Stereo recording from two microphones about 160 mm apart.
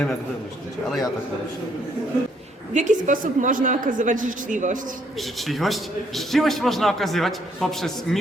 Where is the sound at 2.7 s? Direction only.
50° right (ahead or behind).